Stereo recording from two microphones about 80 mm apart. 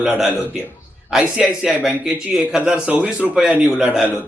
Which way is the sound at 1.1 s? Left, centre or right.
Centre.